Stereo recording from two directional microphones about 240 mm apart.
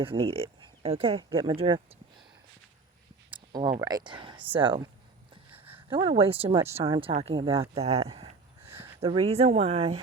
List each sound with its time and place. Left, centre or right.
0.0 s speech: right
3.2 s a sound: centre
3.7 s speech: centre
5.5 s a sound: centre
5.9 s speech: right
8.1 s gasp: right
9.0 s speech: right